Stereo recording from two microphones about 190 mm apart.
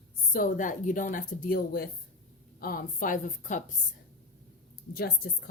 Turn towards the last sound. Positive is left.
turn(degrees=50)  # may be behind; listen again after turning